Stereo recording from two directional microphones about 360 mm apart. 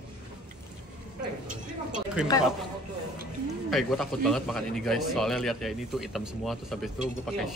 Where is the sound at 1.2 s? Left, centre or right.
Right.